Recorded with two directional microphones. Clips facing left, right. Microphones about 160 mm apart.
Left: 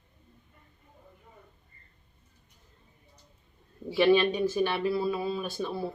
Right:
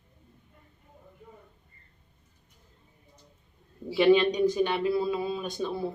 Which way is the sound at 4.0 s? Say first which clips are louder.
Right 2 dB; 20° right (ahead or behind).